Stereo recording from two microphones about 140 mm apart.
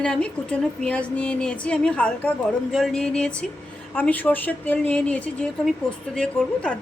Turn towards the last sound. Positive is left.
turn(degrees=5)  # may be behind; listen again after turning